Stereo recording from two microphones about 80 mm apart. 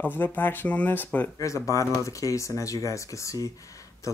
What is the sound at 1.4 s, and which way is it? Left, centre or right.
Speech, left.